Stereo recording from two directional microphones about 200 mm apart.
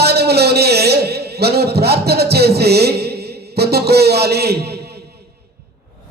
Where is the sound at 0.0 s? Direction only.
55° right (ahead or behind).